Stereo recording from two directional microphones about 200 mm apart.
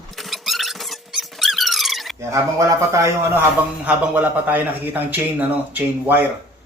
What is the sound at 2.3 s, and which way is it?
A man's voice, 15° right (ahead or behind).